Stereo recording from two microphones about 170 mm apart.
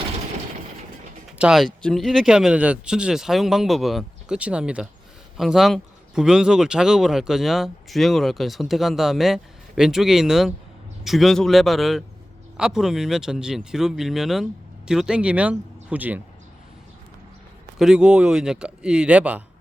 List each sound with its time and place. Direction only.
1.4 s speech: 5° right (ahead or behind)
17.7 s speech: 5° right (ahead or behind)